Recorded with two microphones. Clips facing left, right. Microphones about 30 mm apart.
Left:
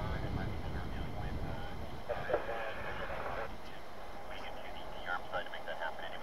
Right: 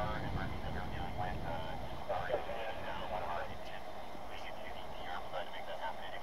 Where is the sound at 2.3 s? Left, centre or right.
Left.